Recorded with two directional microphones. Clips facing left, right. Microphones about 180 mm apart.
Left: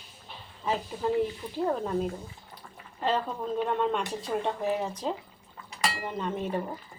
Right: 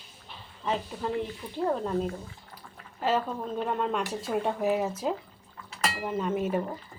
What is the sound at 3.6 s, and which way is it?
Speech, centre (ahead or behind).